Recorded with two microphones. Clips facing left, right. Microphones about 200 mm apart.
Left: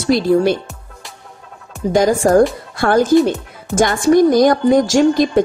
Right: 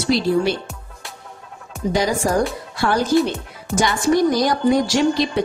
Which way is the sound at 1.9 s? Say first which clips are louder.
Left 7 dB; 50° left (ahead or behind).